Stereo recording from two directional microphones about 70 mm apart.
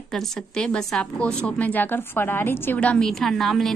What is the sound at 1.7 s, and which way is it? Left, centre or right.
A woman's voice, left.